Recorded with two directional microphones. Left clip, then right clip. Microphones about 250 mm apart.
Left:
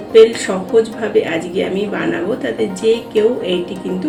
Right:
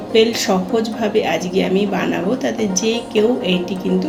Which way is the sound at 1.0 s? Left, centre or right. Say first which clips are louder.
Left 1 dB; right.